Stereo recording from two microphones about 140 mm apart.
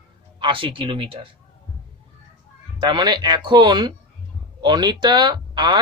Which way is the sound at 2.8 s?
30° right (ahead or behind).